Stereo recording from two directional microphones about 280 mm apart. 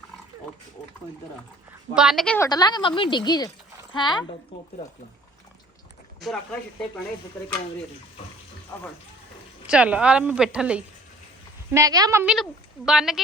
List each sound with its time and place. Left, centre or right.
2.0 s a woman's voice: centre
4.5 s speech: left
6.1 s a woman's voice: centre
9.6 s a woman's voice: centre